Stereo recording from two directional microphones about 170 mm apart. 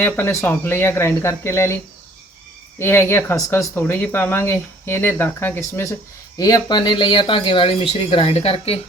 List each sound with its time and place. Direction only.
0.0 s speech: 10° left (ahead or behind); by 8.8 s 35° left (ahead or behind)